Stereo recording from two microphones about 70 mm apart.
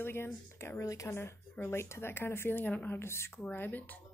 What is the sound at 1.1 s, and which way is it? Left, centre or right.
Speech, left.